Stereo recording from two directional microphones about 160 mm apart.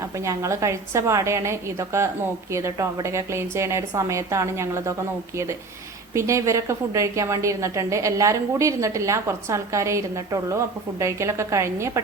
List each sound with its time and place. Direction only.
0.2 s a woman's voice: 20° right (ahead or behind)
6.1 s a woman's voice: 20° right (ahead or behind)